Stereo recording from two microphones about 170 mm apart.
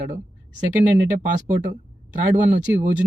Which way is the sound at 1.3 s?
50° right (ahead or behind).